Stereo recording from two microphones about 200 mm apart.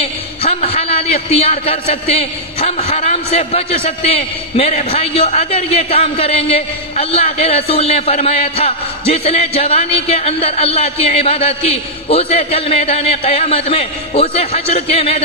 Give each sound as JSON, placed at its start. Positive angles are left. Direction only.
{"t": 0.0, "sound": "a man's voice", "side_deg": 30}